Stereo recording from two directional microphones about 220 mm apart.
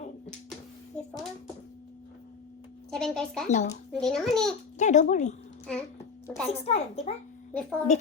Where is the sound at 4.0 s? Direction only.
Centre (ahead or behind).